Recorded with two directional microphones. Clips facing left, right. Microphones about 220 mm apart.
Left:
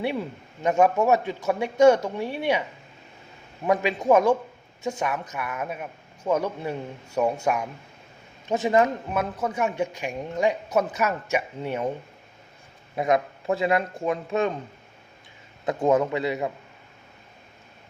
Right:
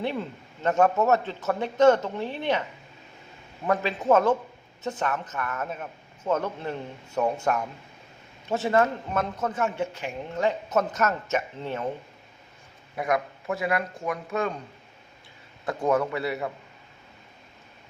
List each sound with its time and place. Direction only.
0.0 s speech: 10° left (ahead or behind)
3.7 s speech: 15° left (ahead or behind)
13.0 s a man's voice: 25° left (ahead or behind)
15.6 s a man's voice: 20° left (ahead or behind)